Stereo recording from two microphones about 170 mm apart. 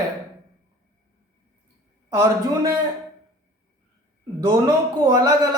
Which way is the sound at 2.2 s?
20° right (ahead or behind).